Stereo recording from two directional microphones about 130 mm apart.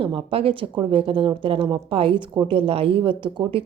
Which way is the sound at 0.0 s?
40° right (ahead or behind).